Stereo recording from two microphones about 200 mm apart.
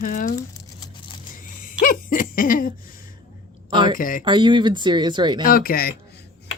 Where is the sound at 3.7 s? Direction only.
25° right (ahead or behind).